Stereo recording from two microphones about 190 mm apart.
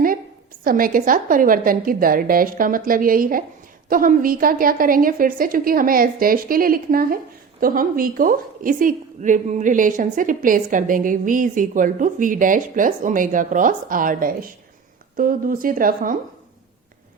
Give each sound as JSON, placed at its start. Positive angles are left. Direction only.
{"t": 0.6, "sound": "a woman's voice", "side_deg": -50}